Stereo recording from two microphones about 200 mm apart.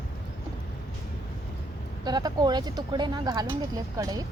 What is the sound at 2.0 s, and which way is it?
A woman's voice, 20° right (ahead or behind).